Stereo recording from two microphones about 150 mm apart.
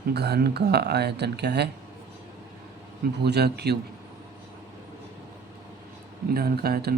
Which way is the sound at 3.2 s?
90° right.